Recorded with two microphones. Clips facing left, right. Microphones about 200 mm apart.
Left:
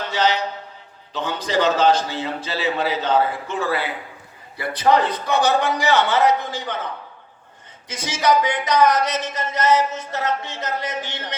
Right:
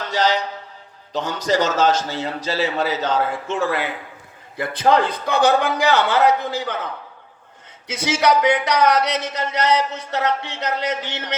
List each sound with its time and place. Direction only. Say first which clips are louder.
0.1 s mantra: right 1 dB; 40° right (ahead or behind)
1.1 s a man's voice: right 2 dB; 40° right (ahead or behind)
4.5 s a man's voice: right 1 dB; 50° right (ahead or behind)
7.9 s speech: right 2 dB; 65° right (ahead or behind)